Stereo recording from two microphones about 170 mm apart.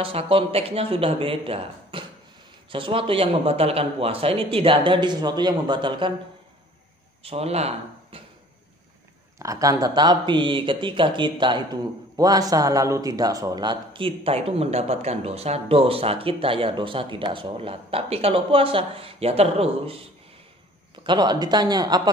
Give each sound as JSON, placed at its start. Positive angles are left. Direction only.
{"t": 0.0, "sound": "speech", "side_deg": -35}
{"t": 7.2, "sound": "speech", "side_deg": -35}
{"t": 9.4, "sound": "speech", "side_deg": -20}
{"t": 21.0, "sound": "speech", "side_deg": -25}